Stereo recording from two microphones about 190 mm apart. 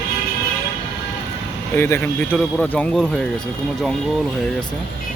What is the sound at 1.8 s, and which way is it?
Speech, 10° left (ahead or behind).